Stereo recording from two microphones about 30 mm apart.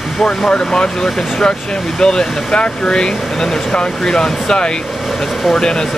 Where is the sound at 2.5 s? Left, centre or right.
Left.